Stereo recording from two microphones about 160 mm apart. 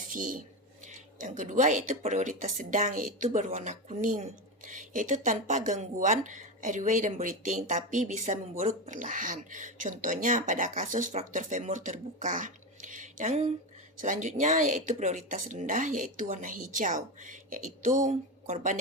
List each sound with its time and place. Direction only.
0.1 s speech: 55° right (ahead or behind)